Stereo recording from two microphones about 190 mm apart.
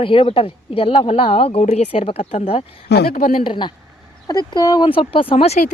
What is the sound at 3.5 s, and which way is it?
Speech, 25° left (ahead or behind).